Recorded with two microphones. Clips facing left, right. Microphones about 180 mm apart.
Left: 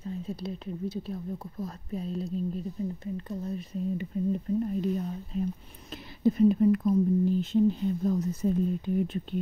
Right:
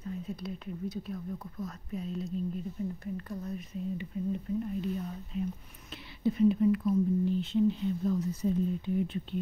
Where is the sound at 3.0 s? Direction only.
20° left (ahead or behind).